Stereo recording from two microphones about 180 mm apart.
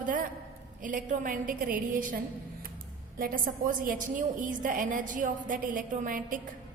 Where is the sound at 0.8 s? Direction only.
45° right (ahead or behind).